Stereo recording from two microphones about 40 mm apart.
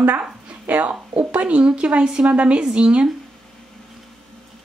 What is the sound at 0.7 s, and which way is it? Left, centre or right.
Speech, right.